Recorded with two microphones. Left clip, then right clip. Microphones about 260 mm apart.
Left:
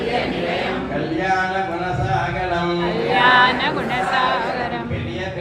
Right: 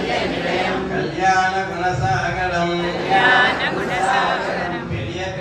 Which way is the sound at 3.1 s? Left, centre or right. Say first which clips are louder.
Left 1 dB; centre.